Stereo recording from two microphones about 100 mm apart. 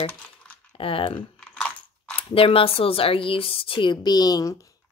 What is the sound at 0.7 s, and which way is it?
Speech, 65° left (ahead or behind).